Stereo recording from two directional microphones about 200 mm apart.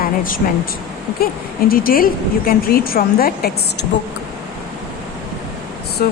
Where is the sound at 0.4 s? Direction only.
45° left (ahead or behind).